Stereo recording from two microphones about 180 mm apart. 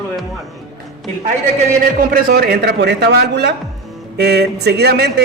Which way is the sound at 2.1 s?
60° right (ahead or behind).